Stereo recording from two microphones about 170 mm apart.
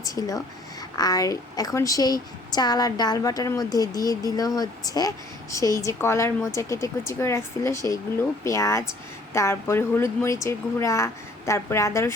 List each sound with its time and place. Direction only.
0.0 s a woman's voice: 20° left (ahead or behind)